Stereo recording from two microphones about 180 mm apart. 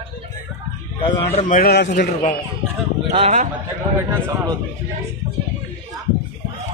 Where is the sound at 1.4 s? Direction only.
55° left (ahead or behind).